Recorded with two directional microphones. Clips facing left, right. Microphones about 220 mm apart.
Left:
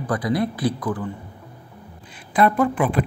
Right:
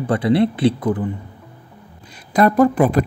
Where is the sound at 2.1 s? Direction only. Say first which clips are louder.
Right 3 dB; 40° right (ahead or behind).